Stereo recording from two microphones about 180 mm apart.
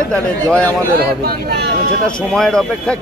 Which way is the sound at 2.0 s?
5° left (ahead or behind).